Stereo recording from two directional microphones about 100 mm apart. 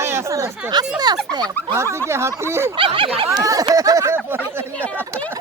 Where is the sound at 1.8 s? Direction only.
30° right (ahead or behind).